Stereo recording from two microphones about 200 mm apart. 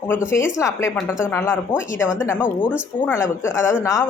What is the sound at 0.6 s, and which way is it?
Speech, 15° left (ahead or behind).